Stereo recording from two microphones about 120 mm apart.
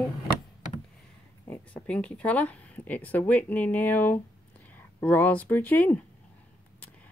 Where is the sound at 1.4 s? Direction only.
20° left (ahead or behind).